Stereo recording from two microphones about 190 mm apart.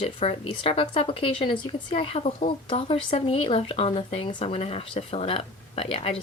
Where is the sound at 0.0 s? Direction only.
30° left (ahead or behind).